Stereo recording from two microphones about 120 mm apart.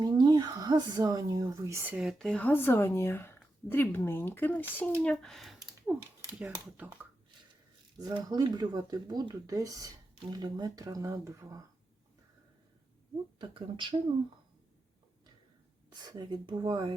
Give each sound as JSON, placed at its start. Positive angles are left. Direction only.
{"t": 0.0, "sound": "speech", "side_deg": -35}
{"t": 1.9, "sound": "speech", "side_deg": -5}
{"t": 2.5, "sound": "speech", "side_deg": 15}
{"t": 5.2, "sound": "speech", "side_deg": 0}
{"t": 5.9, "sound": "speech", "side_deg": -10}
{"t": 7.9, "sound": "speech", "side_deg": -30}
{"t": 13.4, "sound": "speech", "side_deg": -40}
{"t": 15.9, "sound": "speech", "side_deg": -35}